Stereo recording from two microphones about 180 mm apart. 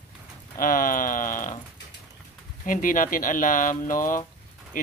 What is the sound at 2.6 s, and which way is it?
Speech, 50° left (ahead or behind).